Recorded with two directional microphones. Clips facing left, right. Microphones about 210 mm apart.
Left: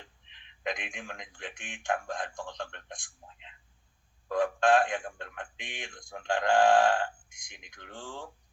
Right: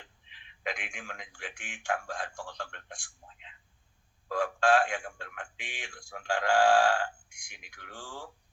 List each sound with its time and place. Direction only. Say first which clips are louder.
0.3 s speech: left 2 dB; 20° left (ahead or behind)